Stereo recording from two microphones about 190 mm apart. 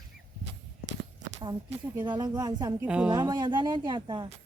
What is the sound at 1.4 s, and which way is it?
Speech, 25° right (ahead or behind).